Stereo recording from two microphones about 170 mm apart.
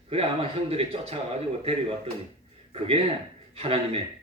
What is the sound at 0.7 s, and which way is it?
Speech, 35° right (ahead or behind).